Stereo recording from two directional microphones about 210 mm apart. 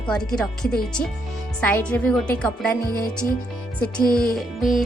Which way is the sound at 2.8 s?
45° left (ahead or behind).